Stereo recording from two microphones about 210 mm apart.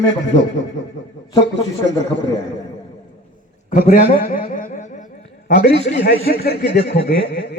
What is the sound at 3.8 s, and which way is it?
A man's voice, 40° left (ahead or behind).